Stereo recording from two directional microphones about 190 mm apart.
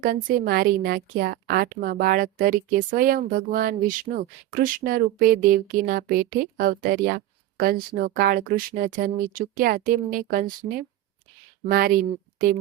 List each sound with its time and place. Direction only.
0.3 s a woman's voice: 50° right (ahead or behind)
11.6 s a woman's voice: 50° right (ahead or behind)